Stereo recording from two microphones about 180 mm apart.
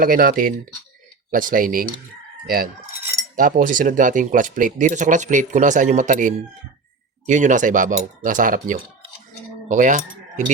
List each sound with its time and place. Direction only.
0.0 s speech: 50° right (ahead or behind)
3.3 s speech: 50° right (ahead or behind)